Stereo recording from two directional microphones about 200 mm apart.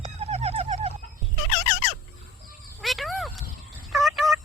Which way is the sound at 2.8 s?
Centre (ahead or behind).